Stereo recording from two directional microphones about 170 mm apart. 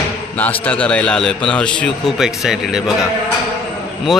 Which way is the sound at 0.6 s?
10° left (ahead or behind).